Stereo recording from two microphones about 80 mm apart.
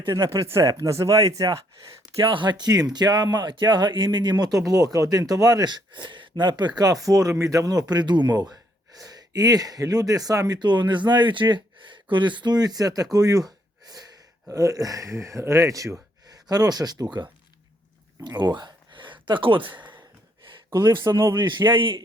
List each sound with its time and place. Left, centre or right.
0.1 s speech: right
2.2 s speech: right
10.6 s speech: right
14.5 s speech: right
21.0 s speech: right
21.3 s a man's voice: right